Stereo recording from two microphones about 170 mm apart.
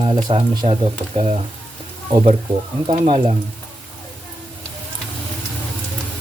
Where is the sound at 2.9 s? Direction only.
30° right (ahead or behind).